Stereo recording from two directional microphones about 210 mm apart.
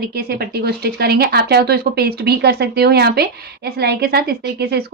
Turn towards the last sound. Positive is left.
turn(degrees=-50)  # may be behind; listen again after turning